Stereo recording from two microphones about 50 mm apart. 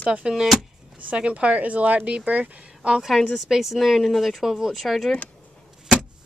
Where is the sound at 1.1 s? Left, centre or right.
Right.